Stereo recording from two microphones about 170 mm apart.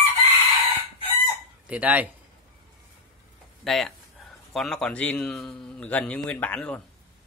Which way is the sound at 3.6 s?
Centre (ahead or behind).